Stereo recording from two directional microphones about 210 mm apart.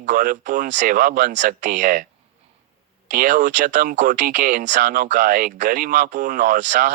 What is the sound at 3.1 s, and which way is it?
Speech, 35° right (ahead or behind).